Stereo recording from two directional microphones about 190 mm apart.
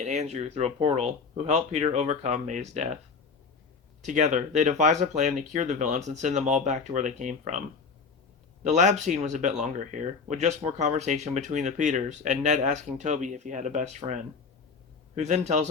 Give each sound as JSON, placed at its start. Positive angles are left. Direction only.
{"t": 0.0, "sound": "speech", "side_deg": -35}
{"t": 4.0, "sound": "speech", "side_deg": -40}
{"t": 8.6, "sound": "speech", "side_deg": -40}